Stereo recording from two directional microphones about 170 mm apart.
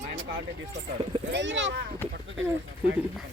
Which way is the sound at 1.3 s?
90° right.